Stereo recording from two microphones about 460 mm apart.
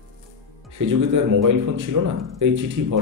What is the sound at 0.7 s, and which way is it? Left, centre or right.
Speech, right.